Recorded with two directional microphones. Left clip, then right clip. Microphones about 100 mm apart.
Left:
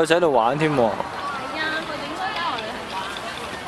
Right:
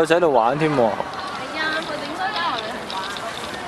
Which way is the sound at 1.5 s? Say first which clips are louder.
Right 3 dB; 35° right (ahead or behind).